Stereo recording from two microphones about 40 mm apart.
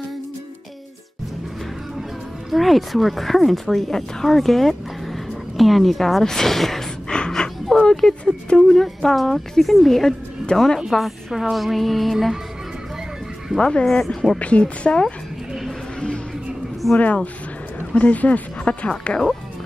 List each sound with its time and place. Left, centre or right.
2.5 s speech: centre
7.1 s a sound: centre
8.5 s a woman's voice: centre
10.5 s speech: left
10.9 s speech: centre
13.6 s speech: left
13.8 s a woman's voice: centre
14.4 s speech: left
16.9 s speech: left
18.6 s music: left
19.0 s speech: left